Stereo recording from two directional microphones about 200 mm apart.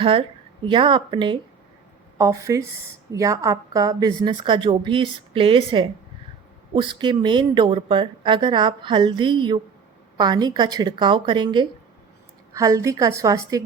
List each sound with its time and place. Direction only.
0.0 s a woman's voice: 25° right (ahead or behind)
7.0 s a woman's voice: 25° right (ahead or behind)